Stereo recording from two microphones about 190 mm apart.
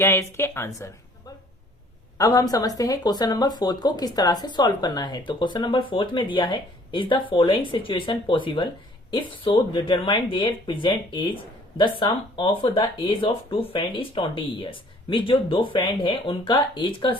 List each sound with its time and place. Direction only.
0.0 s speech: 10° left (ahead or behind)
2.1 s speech: 20° left (ahead or behind)